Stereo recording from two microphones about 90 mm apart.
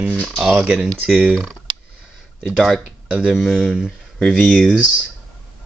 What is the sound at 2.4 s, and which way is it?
Humming, centre (ahead or behind).